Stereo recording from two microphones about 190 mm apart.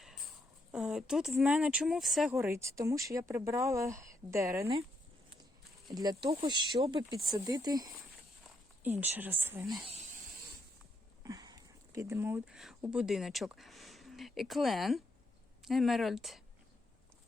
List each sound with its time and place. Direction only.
0.7 s speech: 5° right (ahead or behind)
2.3 s speech: 15° right (ahead or behind)
5.9 s speech: 20° right (ahead or behind)
7.1 s speech: 20° right (ahead or behind)
8.8 s speech: 10° right (ahead or behind)
11.2 s speech: 15° right (ahead or behind); by 16.4 s centre (ahead or behind)